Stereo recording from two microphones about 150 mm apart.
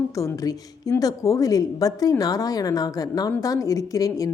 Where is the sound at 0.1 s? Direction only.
20° left (ahead or behind).